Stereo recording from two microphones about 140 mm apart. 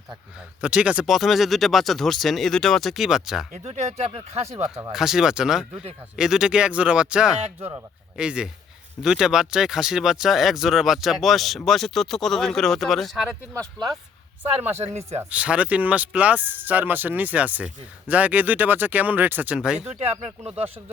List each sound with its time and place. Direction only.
0.3 s speech: 10° right (ahead or behind)
3.6 s speech: 50° right (ahead or behind)
4.9 s speech: 5° right (ahead or behind)
15.2 s speech: 10° right (ahead or behind)
20.0 s speech: 50° right (ahead or behind)
20.5 s speech: 10° right (ahead or behind)